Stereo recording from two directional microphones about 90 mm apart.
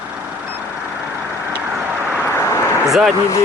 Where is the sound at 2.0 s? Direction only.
15° right (ahead or behind).